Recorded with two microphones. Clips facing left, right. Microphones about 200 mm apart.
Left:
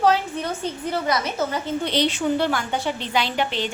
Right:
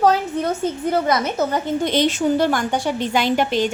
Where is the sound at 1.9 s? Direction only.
45° right (ahead or behind).